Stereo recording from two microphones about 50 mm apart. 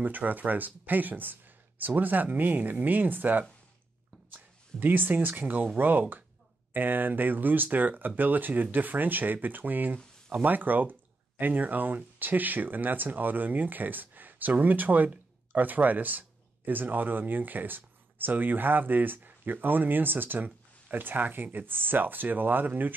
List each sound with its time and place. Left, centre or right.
0.0 s speech: right